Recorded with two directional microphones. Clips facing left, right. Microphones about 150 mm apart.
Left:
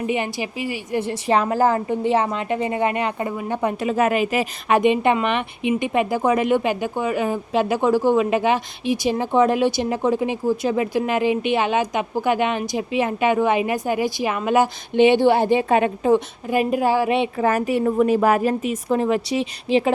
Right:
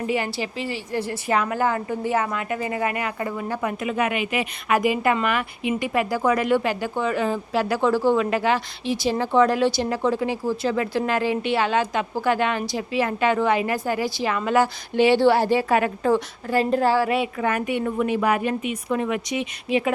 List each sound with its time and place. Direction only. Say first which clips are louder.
0.1 s a woman's voice: left 1 dB; 20° left (ahead or behind)
1.0 s a woman's voice: left 4 dB; 30° left (ahead or behind)
3.6 s a woman's voice: left 5 dB; 35° left (ahead or behind)
4.8 s speech: left 4 dB; 25° left (ahead or behind)